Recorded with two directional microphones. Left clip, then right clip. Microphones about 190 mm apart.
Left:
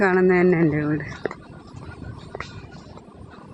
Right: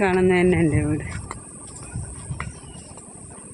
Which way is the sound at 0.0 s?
15° right (ahead or behind).